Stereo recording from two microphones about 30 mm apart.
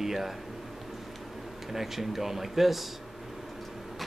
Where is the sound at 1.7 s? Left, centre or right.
Centre.